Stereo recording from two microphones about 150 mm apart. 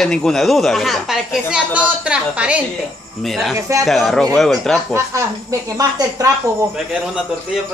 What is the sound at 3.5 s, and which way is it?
Speech, 20° right (ahead or behind).